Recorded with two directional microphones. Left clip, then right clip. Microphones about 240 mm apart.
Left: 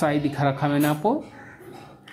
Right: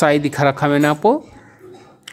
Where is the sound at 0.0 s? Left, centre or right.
Right.